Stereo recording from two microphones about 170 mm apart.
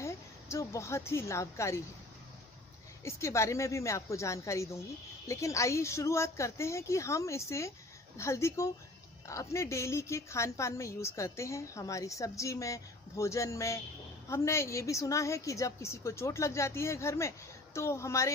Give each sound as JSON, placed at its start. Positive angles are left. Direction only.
{"t": 0.0, "sound": "a woman's voice", "side_deg": 15}
{"t": 3.0, "sound": "a woman's voice", "side_deg": 15}